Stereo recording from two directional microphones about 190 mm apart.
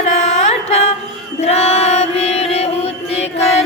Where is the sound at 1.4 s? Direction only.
35° left (ahead or behind).